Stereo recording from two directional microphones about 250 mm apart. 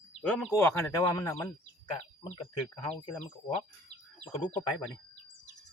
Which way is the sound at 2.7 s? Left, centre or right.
Centre.